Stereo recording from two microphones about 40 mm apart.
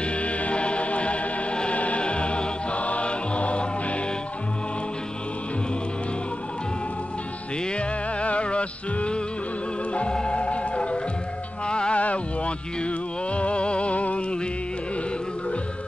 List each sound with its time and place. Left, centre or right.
0.0 s music: left
7.7 s music: left
12.0 s a sound: left